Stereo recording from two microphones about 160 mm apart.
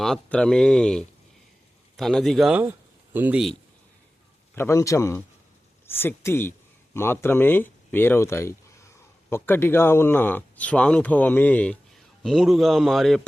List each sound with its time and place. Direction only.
0.0 s speech: 5° left (ahead or behind); by 3.4 s 10° right (ahead or behind)
4.5 s speech: 15° left (ahead or behind); by 13.2 s centre (ahead or behind)